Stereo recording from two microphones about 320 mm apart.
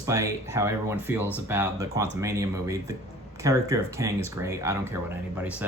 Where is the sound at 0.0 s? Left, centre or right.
Centre.